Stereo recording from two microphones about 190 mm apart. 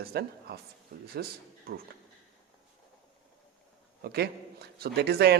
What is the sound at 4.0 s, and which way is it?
A man's voice, 55° right (ahead or behind).